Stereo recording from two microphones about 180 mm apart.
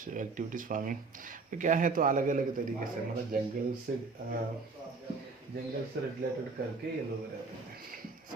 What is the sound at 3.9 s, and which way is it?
Speech, 55° right (ahead or behind).